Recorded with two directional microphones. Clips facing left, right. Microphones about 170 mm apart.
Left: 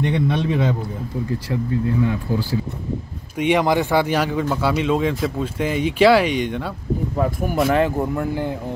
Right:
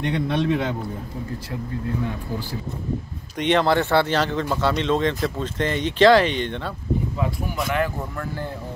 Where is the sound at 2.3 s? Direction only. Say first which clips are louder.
Left 7 dB; 90° left.